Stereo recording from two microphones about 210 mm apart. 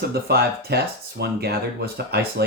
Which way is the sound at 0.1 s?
50° right (ahead or behind).